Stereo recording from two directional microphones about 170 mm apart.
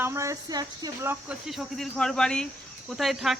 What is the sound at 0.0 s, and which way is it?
Speech, 15° right (ahead or behind).